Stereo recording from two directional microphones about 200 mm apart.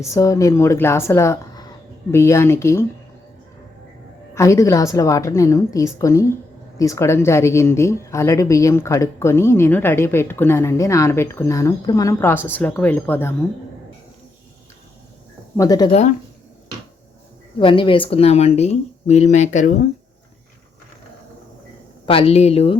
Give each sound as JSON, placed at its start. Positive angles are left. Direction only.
{"t": 0.0, "sound": "a woman's voice", "side_deg": 15}
{"t": 4.4, "sound": "a woman's voice", "side_deg": 15}
{"t": 15.5, "sound": "speech", "side_deg": 20}
{"t": 17.6, "sound": "speech", "side_deg": 25}
{"t": 22.0, "sound": "speech", "side_deg": 30}